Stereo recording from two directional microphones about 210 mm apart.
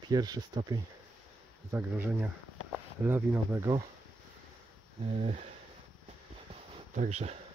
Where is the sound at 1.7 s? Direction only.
10° right (ahead or behind).